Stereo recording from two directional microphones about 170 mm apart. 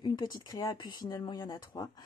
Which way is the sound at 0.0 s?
25° left (ahead or behind).